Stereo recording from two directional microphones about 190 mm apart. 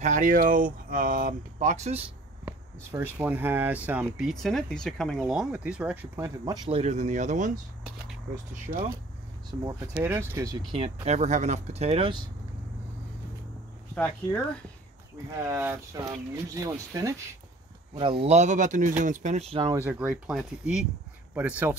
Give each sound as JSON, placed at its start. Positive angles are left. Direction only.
{"t": 0.0, "sound": "speech", "side_deg": -45}
{"t": 2.4, "sound": "speech", "side_deg": -10}
{"t": 6.8, "sound": "speech", "side_deg": -40}
{"t": 8.7, "sound": "speech", "side_deg": -50}
{"t": 9.7, "sound": "speech", "side_deg": -15}
{"t": 10.7, "sound": "speech", "side_deg": -35}
{"t": 13.9, "sound": "speech", "side_deg": 5}
{"t": 15.4, "sound": "speech", "side_deg": -10}
{"t": 18.2, "sound": "speech", "side_deg": -35}
{"t": 19.7, "sound": "speech", "side_deg": -10}